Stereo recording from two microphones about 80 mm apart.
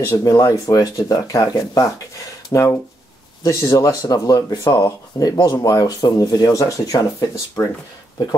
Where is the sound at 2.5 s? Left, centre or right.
Left.